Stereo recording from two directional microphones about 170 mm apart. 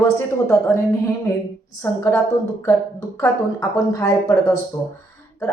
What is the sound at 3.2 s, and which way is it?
A woman's voice, 20° left (ahead or behind).